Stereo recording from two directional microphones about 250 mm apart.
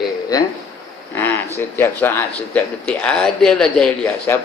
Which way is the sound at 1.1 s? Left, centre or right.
Centre.